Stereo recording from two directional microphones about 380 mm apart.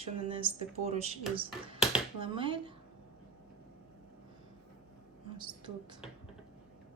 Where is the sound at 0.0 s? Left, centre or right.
Centre.